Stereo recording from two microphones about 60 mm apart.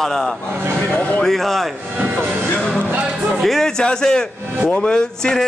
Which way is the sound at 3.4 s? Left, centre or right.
Centre.